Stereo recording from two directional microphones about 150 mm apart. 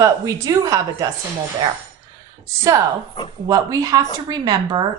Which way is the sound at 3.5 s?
25° right (ahead or behind).